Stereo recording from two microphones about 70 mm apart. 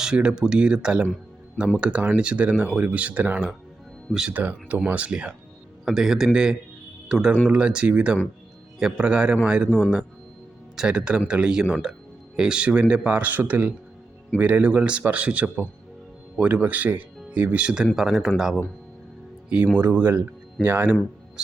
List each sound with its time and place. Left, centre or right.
0.0 s speech: centre
4.1 s speech: centre
4.4 s speech: right
17.9 s speech: centre
19.8 s speech: right